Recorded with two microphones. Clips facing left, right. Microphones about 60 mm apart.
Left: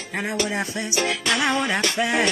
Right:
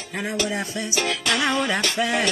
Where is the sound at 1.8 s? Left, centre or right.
Left.